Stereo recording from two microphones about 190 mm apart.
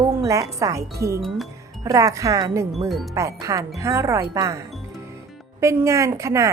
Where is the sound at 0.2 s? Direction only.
15° right (ahead or behind).